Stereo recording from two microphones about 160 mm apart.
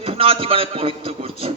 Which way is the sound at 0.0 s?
35° right (ahead or behind).